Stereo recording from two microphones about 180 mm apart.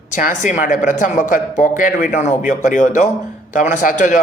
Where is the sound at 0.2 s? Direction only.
45° left (ahead or behind).